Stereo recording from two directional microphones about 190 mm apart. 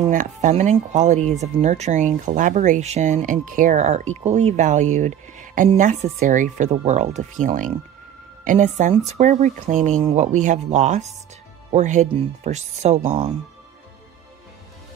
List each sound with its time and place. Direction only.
0.1 s speech: 40° right (ahead or behind)